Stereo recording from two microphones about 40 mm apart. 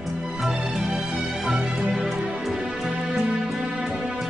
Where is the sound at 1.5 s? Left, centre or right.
Right.